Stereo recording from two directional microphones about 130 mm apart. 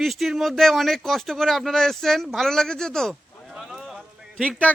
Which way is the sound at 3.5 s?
Centre (ahead or behind).